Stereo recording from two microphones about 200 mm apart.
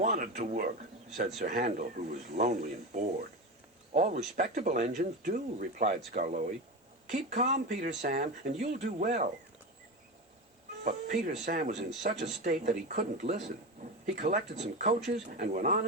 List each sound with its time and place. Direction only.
0.0 s speech: 40° right (ahead or behind)
10.8 s speech: 35° right (ahead or behind)